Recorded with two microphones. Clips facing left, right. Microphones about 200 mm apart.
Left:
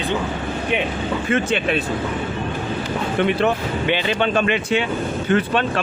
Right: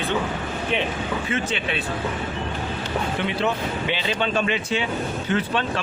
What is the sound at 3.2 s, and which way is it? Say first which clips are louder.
A man's voice: left 8 dB; 55° left (ahead or behind).